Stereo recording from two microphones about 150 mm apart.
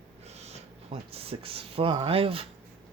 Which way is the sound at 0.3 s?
45° right (ahead or behind).